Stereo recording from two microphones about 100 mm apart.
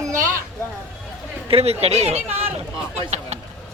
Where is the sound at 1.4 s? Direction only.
80° right.